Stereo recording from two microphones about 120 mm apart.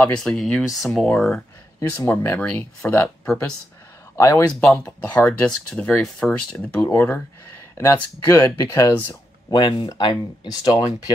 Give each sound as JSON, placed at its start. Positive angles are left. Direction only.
{"t": 0.0, "sound": "speech", "side_deg": 5}
{"t": 4.2, "sound": "speech", "side_deg": 30}
{"t": 4.5, "sound": "speech", "side_deg": 5}
{"t": 6.8, "sound": "speech", "side_deg": 15}
{"t": 9.5, "sound": "speech", "side_deg": 40}